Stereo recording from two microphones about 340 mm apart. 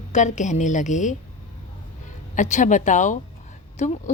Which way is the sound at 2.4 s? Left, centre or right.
Left.